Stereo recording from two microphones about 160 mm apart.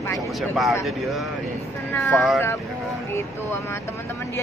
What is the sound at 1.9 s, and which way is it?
Speech, 10° left (ahead or behind).